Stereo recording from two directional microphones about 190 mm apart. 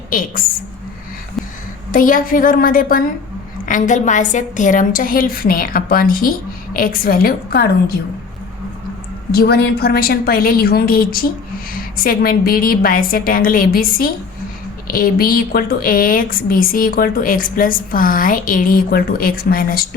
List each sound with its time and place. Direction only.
0.1 s a woman's voice: 45° left (ahead or behind)
1.9 s a woman's voice: 45° left (ahead or behind)
9.3 s a woman's voice: 55° left (ahead or behind)